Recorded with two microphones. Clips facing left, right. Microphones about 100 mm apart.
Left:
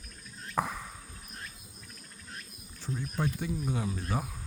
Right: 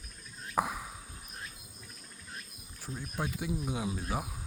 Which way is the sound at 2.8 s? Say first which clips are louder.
Left 4 dB; 5° right (ahead or behind).